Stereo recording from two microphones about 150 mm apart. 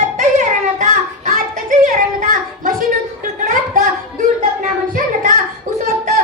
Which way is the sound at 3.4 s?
60° right (ahead or behind).